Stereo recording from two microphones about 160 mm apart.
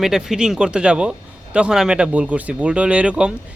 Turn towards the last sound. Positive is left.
turn(degrees=-5)  # may be behind; listen again after turning